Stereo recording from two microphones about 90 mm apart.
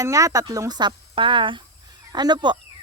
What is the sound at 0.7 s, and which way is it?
Speech, 55° right (ahead or behind).